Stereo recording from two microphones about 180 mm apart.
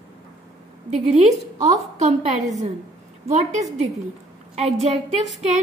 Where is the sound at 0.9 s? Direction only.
40° right (ahead or behind).